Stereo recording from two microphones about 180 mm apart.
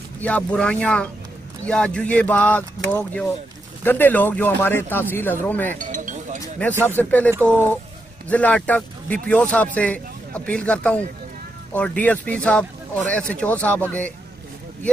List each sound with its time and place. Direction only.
0.2 s speech: 5° left (ahead or behind)
5.8 s chink: 45° right (ahead or behind)
6.7 s speech: 15° right (ahead or behind)
7.0 s speech: 10° left (ahead or behind)